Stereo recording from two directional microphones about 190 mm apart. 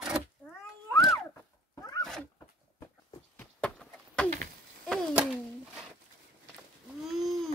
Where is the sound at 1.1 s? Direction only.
15° left (ahead or behind).